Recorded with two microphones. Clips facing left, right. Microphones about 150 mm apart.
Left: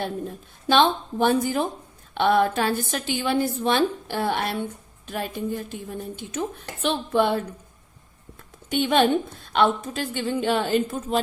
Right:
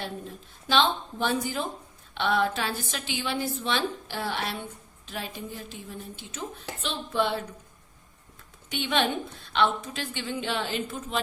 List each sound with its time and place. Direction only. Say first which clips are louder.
0.0 s a woman's voice: left 7 dB; 50° left (ahead or behind)
8.7 s a woman's voice: left 7 dB; 45° left (ahead or behind)